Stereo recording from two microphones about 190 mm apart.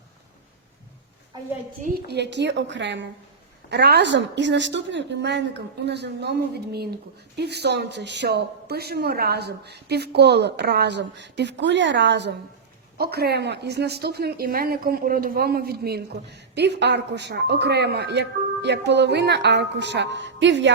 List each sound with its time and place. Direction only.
2.0 s a woman's voice: 60° right (ahead or behind)